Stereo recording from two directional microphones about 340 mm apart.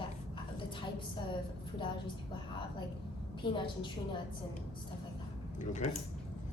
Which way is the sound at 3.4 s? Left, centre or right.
Centre.